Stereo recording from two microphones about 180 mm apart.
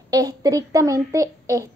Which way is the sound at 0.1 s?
20° right (ahead or behind).